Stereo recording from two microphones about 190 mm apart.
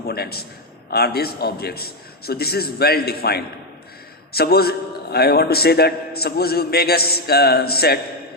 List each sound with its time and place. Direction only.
0.0 s a man's voice: 55° left (ahead or behind)